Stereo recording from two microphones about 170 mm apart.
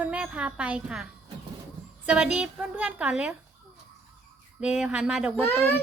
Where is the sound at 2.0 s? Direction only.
5° right (ahead or behind).